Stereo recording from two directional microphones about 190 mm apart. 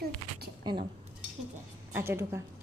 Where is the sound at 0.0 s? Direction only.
55° right (ahead or behind).